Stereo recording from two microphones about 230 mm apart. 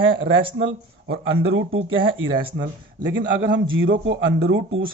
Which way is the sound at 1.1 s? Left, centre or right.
Right.